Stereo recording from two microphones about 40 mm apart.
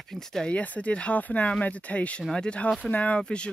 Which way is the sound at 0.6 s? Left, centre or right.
Left.